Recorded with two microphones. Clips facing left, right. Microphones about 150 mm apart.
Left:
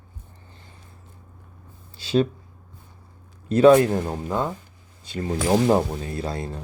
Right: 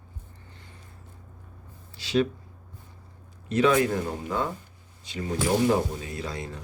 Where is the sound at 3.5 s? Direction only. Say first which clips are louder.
Left 7 dB; 35° left (ahead or behind).